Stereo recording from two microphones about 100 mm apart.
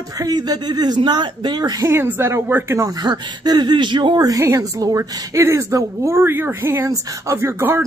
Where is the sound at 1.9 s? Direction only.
25° right (ahead or behind).